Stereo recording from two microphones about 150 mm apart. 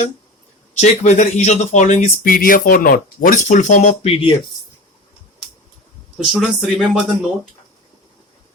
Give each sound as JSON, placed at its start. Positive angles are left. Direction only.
{"t": 0.7, "sound": "speech", "side_deg": 50}
{"t": 6.3, "sound": "speech", "side_deg": 0}